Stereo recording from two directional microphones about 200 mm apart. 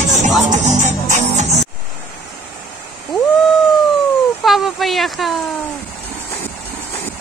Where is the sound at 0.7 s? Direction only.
35° right (ahead or behind).